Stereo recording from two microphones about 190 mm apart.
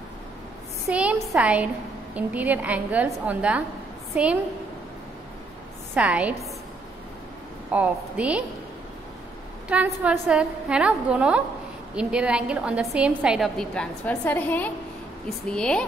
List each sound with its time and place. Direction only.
0.8 s a woman's voice: 5° right (ahead or behind)
5.9 s a woman's voice: 5° right (ahead or behind)
7.7 s a woman's voice: 5° right (ahead or behind)
9.7 s a woman's voice: 5° right (ahead or behind)